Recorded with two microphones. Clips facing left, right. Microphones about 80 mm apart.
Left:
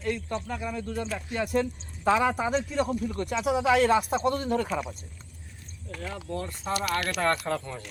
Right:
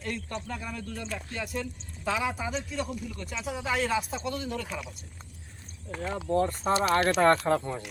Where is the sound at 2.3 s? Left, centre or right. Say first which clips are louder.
Left 6 dB; left.